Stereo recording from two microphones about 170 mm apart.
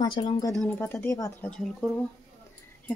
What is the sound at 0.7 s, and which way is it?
Speech, 15° left (ahead or behind).